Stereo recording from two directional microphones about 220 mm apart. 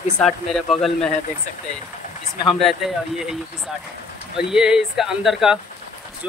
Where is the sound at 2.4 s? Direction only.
Centre (ahead or behind).